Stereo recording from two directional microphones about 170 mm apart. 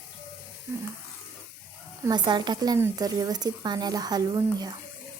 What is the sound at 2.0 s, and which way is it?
A woman's voice, 25° right (ahead or behind).